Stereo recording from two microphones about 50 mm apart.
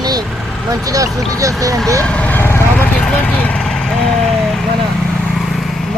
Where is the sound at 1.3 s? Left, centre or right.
Right.